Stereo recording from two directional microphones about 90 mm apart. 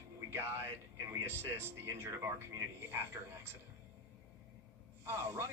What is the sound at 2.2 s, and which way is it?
Speech, 25° right (ahead or behind).